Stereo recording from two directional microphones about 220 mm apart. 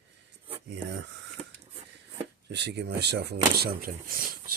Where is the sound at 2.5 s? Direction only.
50° right (ahead or behind).